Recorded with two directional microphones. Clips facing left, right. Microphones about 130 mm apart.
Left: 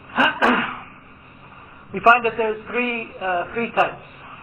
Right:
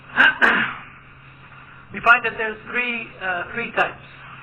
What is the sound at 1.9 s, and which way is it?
A man's voice, 30° left (ahead or behind).